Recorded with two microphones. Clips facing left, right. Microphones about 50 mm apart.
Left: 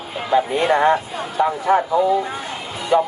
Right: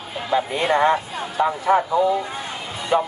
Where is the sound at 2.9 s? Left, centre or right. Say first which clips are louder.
Left 3 dB; right.